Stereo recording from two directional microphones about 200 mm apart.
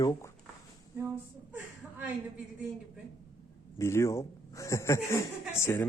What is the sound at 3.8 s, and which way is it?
Snicker, 15° left (ahead or behind).